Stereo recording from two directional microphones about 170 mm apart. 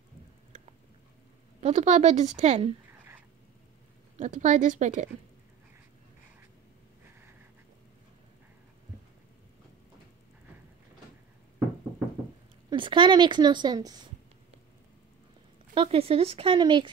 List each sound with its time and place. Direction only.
1.6 s a woman's voice: 45° right (ahead or behind)
4.2 s a woman's voice: 45° right (ahead or behind)
12.6 s a woman's voice: 30° right (ahead or behind)
15.7 s speech: 30° right (ahead or behind)